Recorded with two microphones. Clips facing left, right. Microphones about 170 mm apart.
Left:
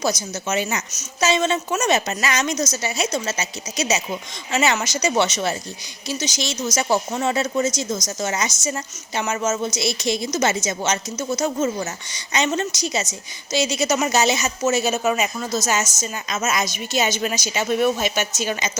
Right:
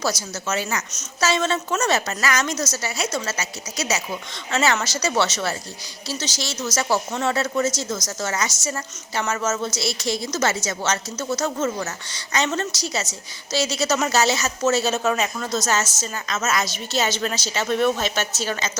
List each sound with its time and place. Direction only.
0.0 s a woman's voice: 15° left (ahead or behind)